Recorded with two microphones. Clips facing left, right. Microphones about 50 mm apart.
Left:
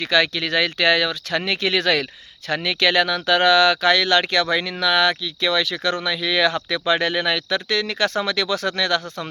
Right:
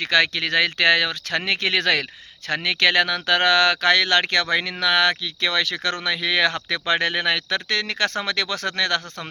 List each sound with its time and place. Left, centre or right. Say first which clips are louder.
0.0 s speech: left 1 dB; right